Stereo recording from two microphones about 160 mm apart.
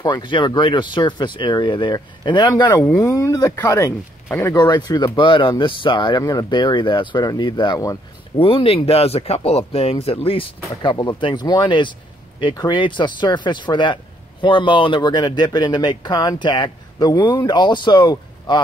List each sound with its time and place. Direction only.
0.0 s speech: 30° left (ahead or behind)
2.8 s speech: 15° left (ahead or behind)
8.4 s speech: 35° left (ahead or behind)